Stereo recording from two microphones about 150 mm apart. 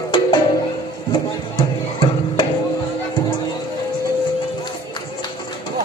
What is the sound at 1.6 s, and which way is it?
Music, 35° left (ahead or behind).